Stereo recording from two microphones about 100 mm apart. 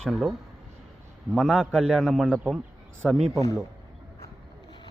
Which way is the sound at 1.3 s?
Centre (ahead or behind).